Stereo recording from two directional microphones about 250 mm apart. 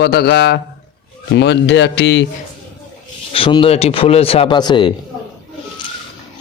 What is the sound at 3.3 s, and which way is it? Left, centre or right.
Speech, centre.